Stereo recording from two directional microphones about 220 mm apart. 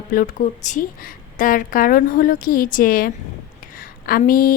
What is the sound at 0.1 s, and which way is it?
A woman's voice, 40° left (ahead or behind).